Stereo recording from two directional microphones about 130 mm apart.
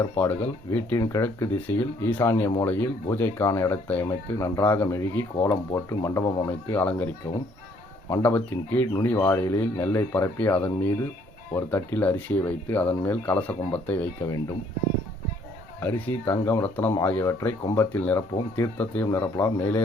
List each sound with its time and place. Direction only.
0.2 s speech: 15° left (ahead or behind)
4.0 s speech: 25° left (ahead or behind)
6.2 s speech: 35° left (ahead or behind)
6.7 s speech: 15° left (ahead or behind)
8.2 s speech: 15° left (ahead or behind)
15.8 s speech: 15° left (ahead or behind)
16.3 s speech: 25° left (ahead or behind)